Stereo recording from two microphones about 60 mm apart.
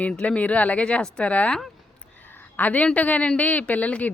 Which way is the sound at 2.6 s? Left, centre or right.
Left.